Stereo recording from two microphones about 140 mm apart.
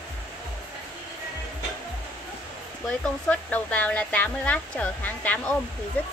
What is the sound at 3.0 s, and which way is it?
Speech, 10° left (ahead or behind).